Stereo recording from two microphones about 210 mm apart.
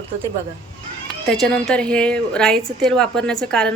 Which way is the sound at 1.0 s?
5° left (ahead or behind).